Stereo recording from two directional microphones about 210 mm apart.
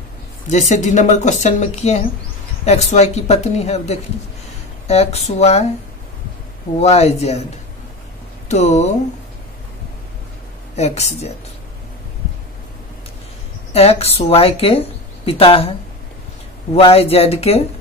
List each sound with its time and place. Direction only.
0.5 s speech: 35° left (ahead or behind)
6.8 s speech: 30° left (ahead or behind)
8.5 s speech: 35° left (ahead or behind)
10.8 s speech: 30° left (ahead or behind)
13.7 s speech: 30° left (ahead or behind)
16.7 s speech: 30° left (ahead or behind)